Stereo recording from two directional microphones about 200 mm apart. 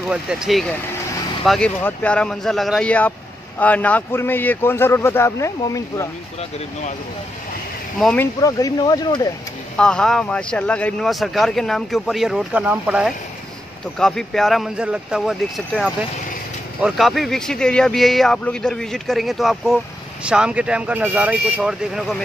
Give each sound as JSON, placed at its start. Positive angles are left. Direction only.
{"t": 0.1, "sound": "a man's voice", "side_deg": -5}
{"t": 8.0, "sound": "speech", "side_deg": 5}
{"t": 8.4, "sound": "speech", "side_deg": 15}
{"t": 9.8, "sound": "speech", "side_deg": 5}